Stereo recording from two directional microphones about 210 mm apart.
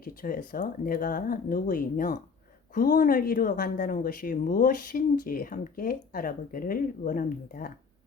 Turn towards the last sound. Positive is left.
turn(degrees=40)  # may be behind; listen again after turning